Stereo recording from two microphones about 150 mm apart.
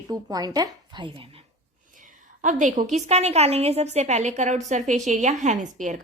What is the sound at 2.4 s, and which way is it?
A woman's voice, 55° right (ahead or behind).